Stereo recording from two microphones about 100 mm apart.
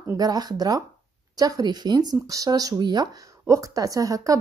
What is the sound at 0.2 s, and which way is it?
A woman's voice, 40° right (ahead or behind).